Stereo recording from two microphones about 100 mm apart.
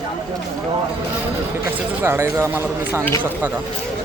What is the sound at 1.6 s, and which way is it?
Speech, 25° right (ahead or behind).